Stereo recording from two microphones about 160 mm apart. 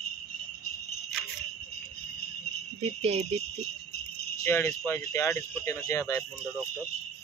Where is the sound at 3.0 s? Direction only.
40° right (ahead or behind).